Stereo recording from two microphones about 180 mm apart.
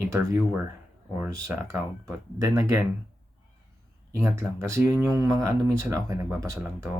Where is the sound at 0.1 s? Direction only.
15° right (ahead or behind).